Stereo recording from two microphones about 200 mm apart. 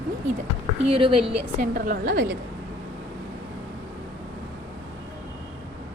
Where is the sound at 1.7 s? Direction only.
45° right (ahead or behind).